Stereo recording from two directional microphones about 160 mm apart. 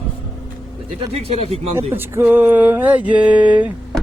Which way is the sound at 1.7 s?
15° right (ahead or behind).